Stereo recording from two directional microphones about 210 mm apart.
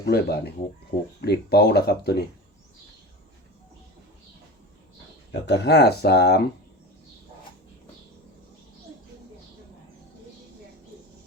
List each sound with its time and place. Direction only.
0.0 s speech: 50° left (ahead or behind)
5.3 s speech: 50° left (ahead or behind)